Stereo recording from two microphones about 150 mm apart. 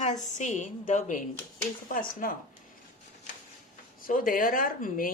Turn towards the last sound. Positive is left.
turn(degrees=65)  # may be behind; listen again after turning